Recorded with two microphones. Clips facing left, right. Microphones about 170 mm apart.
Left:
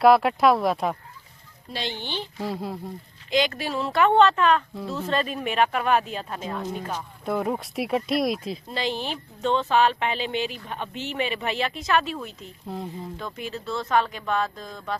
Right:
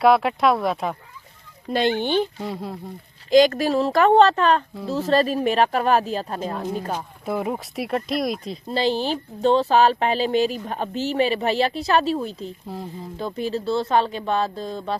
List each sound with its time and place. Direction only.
0.0 s speech: centre (ahead or behind)
1.7 s speech: 55° right (ahead or behind)
2.4 s speech: centre (ahead or behind)
3.2 s speech: 45° right (ahead or behind)
4.7 s speech: centre (ahead or behind)
4.9 s speech: 40° right (ahead or behind)
7.3 s speech: 5° right (ahead or behind)
8.7 s speech: 30° right (ahead or behind)
12.6 s speech: centre (ahead or behind)
13.1 s speech: 35° right (ahead or behind)